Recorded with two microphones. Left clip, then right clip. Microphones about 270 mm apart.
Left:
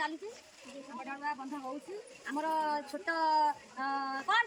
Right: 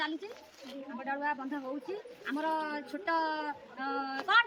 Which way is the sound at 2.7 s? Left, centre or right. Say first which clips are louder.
Right 2 dB; centre.